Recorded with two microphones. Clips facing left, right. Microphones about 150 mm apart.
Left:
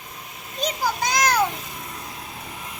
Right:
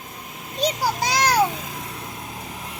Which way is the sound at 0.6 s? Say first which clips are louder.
Right 2 dB; 35° right (ahead or behind).